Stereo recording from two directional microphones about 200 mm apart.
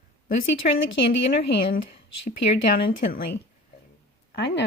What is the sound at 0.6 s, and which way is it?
Speech, 40° left (ahead or behind).